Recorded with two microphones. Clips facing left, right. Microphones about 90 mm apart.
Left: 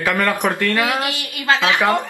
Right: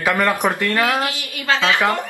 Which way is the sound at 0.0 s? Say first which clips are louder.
Right 1 dB; 20° right (ahead or behind).